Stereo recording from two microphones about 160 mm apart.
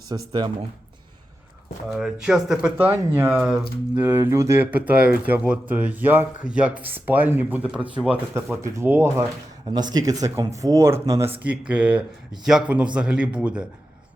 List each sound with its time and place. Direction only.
0.1 s speech: 30° right (ahead or behind)
1.9 s speech: 5° right (ahead or behind)
8.6 s speech: 15° right (ahead or behind)